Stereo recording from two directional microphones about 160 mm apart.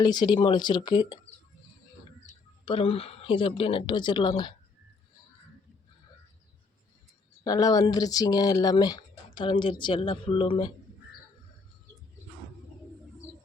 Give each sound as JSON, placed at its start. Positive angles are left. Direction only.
{"t": 0.0, "sound": "speech", "side_deg": 25}
{"t": 2.6, "sound": "speech", "side_deg": 35}
{"t": 7.4, "sound": "speech", "side_deg": 25}